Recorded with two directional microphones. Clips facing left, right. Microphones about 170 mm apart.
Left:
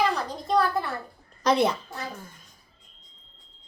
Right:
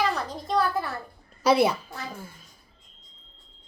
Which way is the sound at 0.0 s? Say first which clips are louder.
Left 1 dB; centre (ahead or behind).